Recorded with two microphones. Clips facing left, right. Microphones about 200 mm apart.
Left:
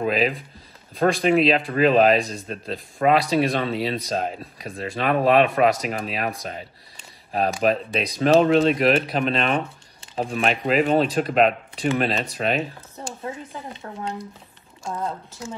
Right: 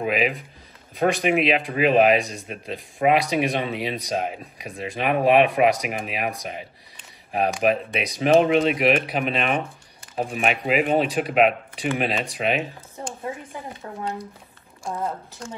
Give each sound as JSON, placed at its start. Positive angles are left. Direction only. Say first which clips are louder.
{"t": 0.0, "sound": "speech", "louder": "left 1 dB", "side_deg": -10}